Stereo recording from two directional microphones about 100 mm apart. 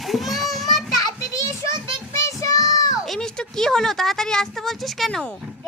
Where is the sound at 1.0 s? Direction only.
35° left (ahead or behind).